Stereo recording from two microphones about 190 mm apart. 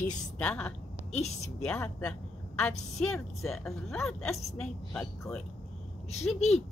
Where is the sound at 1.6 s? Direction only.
10° left (ahead or behind).